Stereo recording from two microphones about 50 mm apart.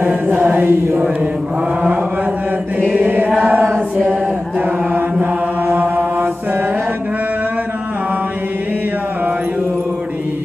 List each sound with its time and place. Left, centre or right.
0.0 s chant: right
3.2 s chant: centre
3.4 s chant: right
3.7 s chant: centre
4.6 s chant: right
5.2 s mantra: right
6.1 s mantra: right